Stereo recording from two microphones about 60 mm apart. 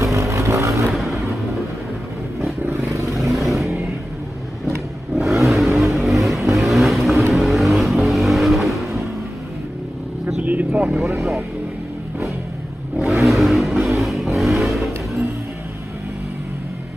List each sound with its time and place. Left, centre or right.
0.0 s vehicle: right
0.9 s vehicle: centre
3.2 s vehicle: centre
5.1 s vehicle: centre
10.2 s vehicle: right
11.1 s vehicle: centre
13.2 s vehicle: centre